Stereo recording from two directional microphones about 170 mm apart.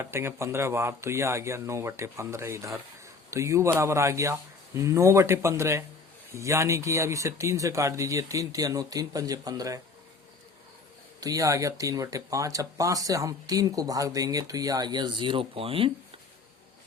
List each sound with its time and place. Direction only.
0.0 s speech: 15° right (ahead or behind)
11.2 s speech: 20° right (ahead or behind)